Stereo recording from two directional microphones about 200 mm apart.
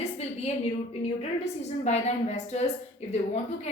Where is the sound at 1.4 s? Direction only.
35° left (ahead or behind).